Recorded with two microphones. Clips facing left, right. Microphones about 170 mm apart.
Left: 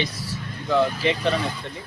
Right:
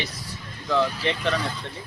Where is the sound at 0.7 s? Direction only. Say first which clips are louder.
Left 3 dB; 10° left (ahead or behind).